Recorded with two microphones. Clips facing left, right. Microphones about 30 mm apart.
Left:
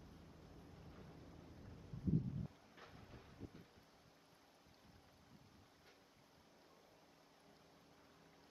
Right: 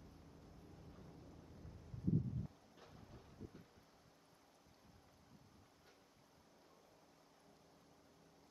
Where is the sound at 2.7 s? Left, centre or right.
Centre.